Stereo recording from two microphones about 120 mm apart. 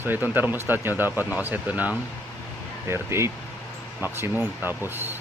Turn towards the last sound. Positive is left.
turn(degrees=-20)  # may be behind; listen again after turning